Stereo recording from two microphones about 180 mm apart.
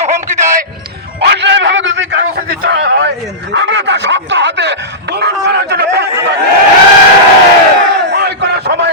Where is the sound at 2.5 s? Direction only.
50° right (ahead or behind).